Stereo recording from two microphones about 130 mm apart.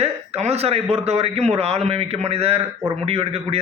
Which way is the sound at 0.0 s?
55° right (ahead or behind).